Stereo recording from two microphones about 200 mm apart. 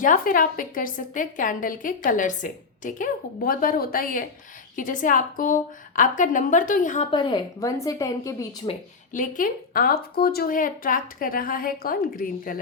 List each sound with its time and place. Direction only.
0.0 s a woman's voice: 45° left (ahead or behind)
7.1 s a woman's voice: 25° left (ahead or behind)
9.1 s a woman's voice: 45° left (ahead or behind)